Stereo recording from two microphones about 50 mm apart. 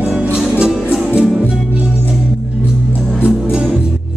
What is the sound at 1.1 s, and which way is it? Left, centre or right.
Music, centre.